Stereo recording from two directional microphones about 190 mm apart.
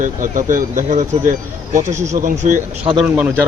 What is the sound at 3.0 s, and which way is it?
Speech, 10° right (ahead or behind).